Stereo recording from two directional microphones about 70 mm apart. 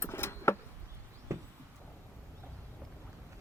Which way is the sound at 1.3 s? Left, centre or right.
Right.